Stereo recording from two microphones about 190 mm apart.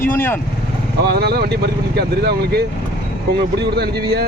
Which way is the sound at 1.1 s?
55° right (ahead or behind).